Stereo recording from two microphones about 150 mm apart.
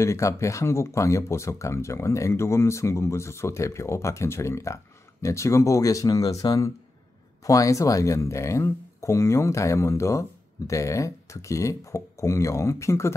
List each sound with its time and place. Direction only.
0.0 s speech: 20° left (ahead or behind)